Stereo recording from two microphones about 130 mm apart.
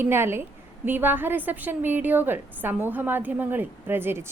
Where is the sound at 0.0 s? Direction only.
20° right (ahead or behind).